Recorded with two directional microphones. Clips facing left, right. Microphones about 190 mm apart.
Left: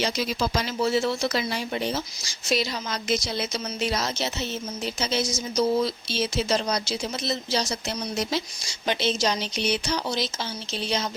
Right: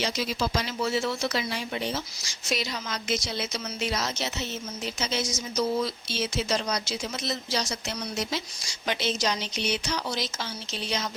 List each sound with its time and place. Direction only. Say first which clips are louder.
0.0 s speech: left 2 dB; 40° left (ahead or behind)